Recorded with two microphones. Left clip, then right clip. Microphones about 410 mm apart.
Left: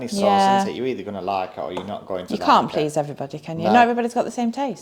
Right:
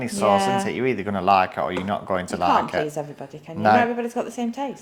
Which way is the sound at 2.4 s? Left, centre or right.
Left.